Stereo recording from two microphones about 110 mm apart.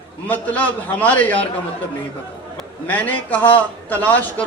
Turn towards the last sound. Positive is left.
turn(degrees=15)  # may be behind; listen again after turning